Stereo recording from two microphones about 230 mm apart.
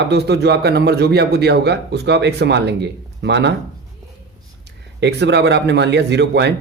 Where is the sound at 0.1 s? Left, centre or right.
Right.